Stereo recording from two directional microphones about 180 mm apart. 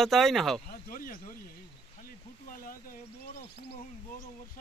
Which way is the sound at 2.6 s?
50° left (ahead or behind).